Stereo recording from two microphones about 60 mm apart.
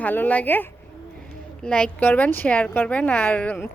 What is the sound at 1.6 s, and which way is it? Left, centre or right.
Speech, centre.